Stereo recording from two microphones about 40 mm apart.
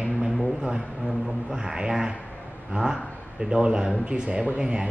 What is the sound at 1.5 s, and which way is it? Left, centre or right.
Speech, centre.